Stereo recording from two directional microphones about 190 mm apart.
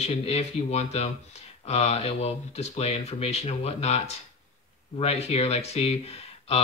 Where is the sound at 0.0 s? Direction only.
35° left (ahead or behind).